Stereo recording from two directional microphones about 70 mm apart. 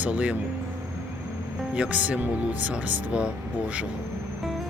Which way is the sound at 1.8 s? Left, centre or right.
Right.